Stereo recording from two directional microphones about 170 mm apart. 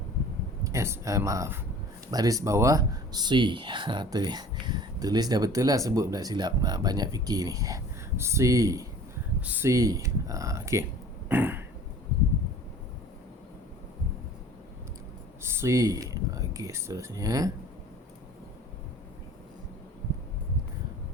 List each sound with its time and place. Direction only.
0.6 s speech: 20° right (ahead or behind)
11.3 s a sound: 10° right (ahead or behind)
15.5 s speech: 20° right (ahead or behind)